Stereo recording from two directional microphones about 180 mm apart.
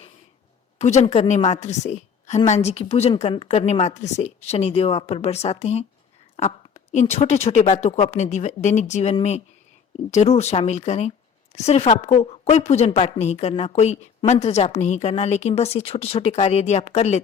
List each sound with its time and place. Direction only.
0.8 s a woman's voice: 40° left (ahead or behind)